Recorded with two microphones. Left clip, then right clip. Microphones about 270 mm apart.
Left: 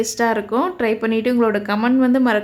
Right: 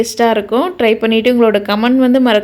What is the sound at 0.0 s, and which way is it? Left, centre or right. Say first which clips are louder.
A woman's voice: right 6 dB; centre.